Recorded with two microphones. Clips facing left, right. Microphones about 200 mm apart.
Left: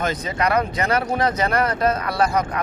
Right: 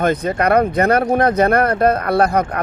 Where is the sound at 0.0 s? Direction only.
55° right (ahead or behind).